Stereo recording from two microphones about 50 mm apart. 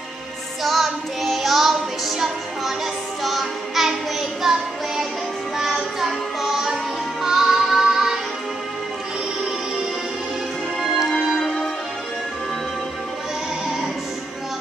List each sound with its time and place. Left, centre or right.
0.7 s music: centre
10.8 s music: centre